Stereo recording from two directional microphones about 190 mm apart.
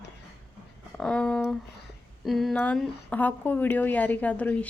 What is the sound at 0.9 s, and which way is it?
A woman's voice, 5° left (ahead or behind).